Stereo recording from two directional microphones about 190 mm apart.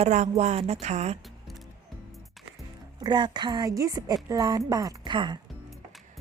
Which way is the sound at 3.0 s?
25° right (ahead or behind).